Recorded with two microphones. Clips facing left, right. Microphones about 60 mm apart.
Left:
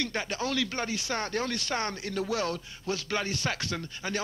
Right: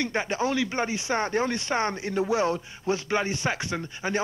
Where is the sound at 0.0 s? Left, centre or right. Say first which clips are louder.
Right 5 dB; right.